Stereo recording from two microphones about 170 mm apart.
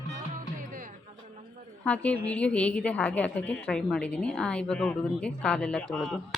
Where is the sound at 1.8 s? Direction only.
10° left (ahead or behind).